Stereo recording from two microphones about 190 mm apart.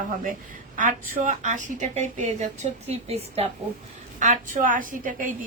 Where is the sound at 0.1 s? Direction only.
45° right (ahead or behind).